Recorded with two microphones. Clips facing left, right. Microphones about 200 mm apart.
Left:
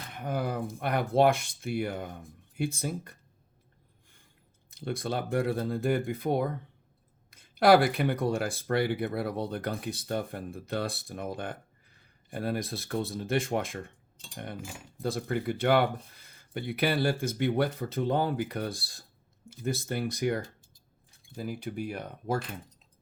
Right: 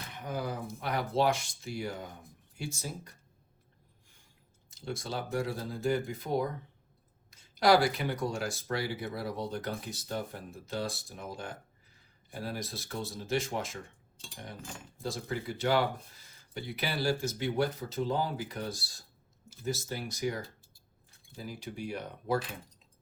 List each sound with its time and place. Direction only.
0.2 s speech: 55° left (ahead or behind)
4.7 s speech: 55° left (ahead or behind)
15.0 s speech: 60° left (ahead or behind)